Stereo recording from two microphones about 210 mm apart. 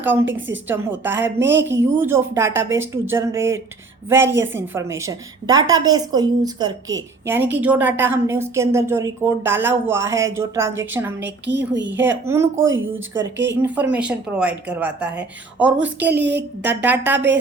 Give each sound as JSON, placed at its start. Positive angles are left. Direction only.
{"t": 0.0, "sound": "a woman's voice", "side_deg": -10}
{"t": 1.4, "sound": "a woman's voice", "side_deg": -60}
{"t": 1.7, "sound": "a woman's voice", "side_deg": -10}
{"t": 11.2, "sound": "a woman's voice", "side_deg": -55}
{"t": 11.9, "sound": "a woman's voice", "side_deg": -10}
{"t": 13.3, "sound": "a woman's voice", "side_deg": -60}
{"t": 13.6, "sound": "a woman's voice", "side_deg": -5}
{"t": 16.1, "sound": "a woman's voice", "side_deg": -55}
{"t": 16.6, "sound": "a woman's voice", "side_deg": -10}